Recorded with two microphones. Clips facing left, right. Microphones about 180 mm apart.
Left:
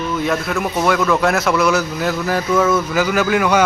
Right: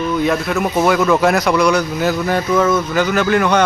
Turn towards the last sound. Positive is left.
turn(degrees=5)  # may be behind; listen again after turning